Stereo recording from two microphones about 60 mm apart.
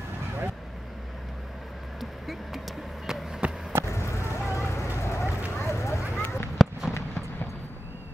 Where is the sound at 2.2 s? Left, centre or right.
Centre.